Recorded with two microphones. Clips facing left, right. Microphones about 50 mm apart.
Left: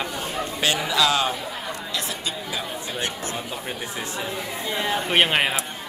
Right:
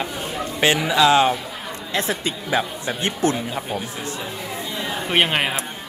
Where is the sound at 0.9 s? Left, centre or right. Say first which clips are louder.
Right 7 dB; right.